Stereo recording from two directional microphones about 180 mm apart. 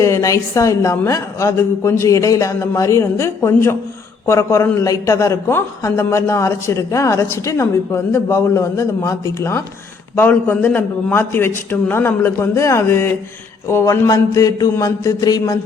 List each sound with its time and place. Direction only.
0.0 s a man's voice: 15° left (ahead or behind)